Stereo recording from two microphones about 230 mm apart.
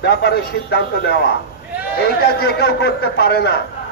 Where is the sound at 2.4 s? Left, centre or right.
Left.